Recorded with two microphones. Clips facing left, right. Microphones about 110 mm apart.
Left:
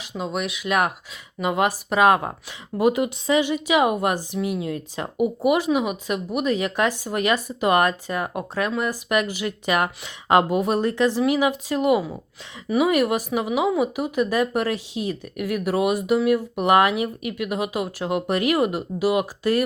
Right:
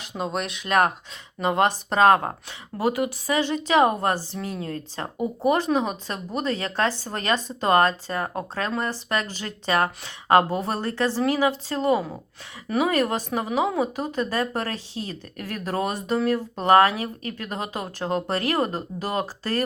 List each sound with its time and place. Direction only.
0.2 s a woman's voice: 5° left (ahead or behind); by 3.5 s 20° left (ahead or behind)
3.5 s speech: 10° left (ahead or behind)